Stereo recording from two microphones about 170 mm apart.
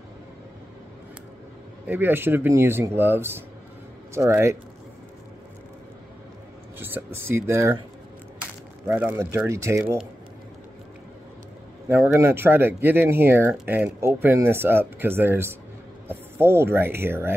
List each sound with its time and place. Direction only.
1.9 s speech: 10° right (ahead or behind)
6.8 s speech: 10° right (ahead or behind)
8.8 s speech: 10° right (ahead or behind)
11.9 s speech: 15° right (ahead or behind)